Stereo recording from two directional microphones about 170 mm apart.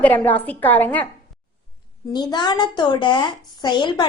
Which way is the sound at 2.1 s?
25° left (ahead or behind).